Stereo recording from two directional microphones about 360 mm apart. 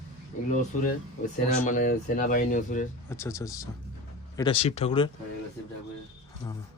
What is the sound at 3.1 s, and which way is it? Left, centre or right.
Speech, centre.